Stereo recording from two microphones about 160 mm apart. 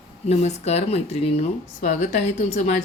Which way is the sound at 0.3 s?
45° left (ahead or behind).